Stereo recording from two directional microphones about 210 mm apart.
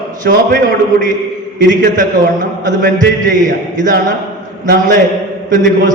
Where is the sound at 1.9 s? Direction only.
40° right (ahead or behind).